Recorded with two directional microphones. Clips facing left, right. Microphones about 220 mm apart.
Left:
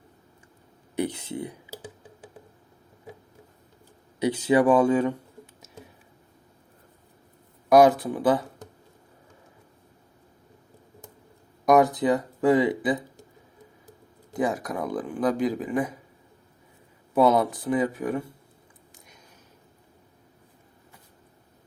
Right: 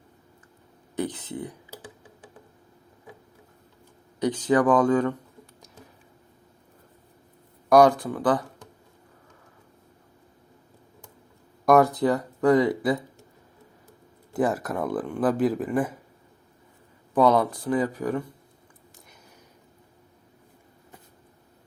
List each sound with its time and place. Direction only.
0.9 s speech: 10° left (ahead or behind)
4.2 s speech: 10° left (ahead or behind)
7.7 s speech: 5° left (ahead or behind)
11.6 s speech: centre (ahead or behind)
14.3 s speech: 5° right (ahead or behind)
17.2 s speech: 5° left (ahead or behind)
17.7 s speech: 20° left (ahead or behind)
17.9 s speech: 5° left (ahead or behind)